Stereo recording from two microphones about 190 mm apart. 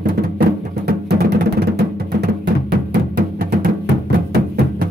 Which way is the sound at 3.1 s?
50° right (ahead or behind).